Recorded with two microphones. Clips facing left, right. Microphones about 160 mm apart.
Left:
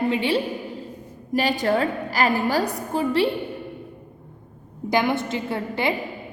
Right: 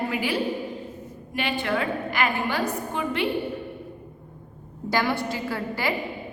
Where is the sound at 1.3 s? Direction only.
40° left (ahead or behind).